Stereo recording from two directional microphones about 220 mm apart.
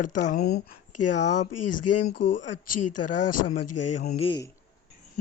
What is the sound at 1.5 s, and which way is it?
Speech, 90° left.